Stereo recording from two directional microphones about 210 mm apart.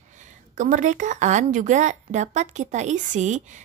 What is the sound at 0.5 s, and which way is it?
A woman's voice, 35° right (ahead or behind).